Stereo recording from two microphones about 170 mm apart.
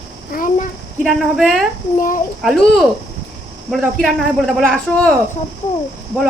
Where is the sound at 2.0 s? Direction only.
50° left (ahead or behind).